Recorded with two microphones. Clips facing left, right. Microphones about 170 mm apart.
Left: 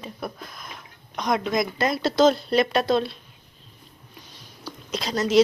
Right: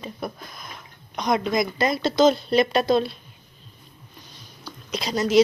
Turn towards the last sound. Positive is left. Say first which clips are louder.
# right 1 dB
turn(degrees=-5)  # may be behind; listen again after turning